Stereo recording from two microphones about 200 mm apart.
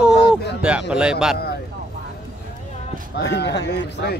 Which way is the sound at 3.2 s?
60° left (ahead or behind).